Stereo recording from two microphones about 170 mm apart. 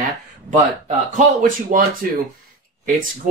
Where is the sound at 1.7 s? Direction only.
45° right (ahead or behind).